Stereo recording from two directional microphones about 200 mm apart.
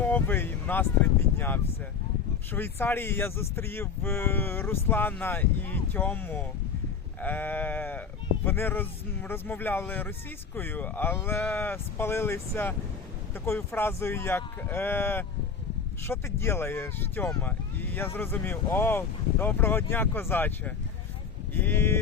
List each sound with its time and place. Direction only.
0.0 s speech: 10° left (ahead or behind)